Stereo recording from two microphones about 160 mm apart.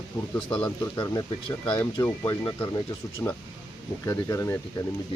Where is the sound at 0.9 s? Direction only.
25° left (ahead or behind).